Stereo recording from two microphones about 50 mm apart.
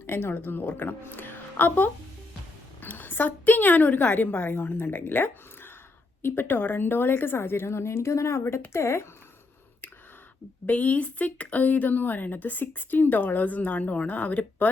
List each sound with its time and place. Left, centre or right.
0.0 s a woman's voice: left
10.7 s speech: left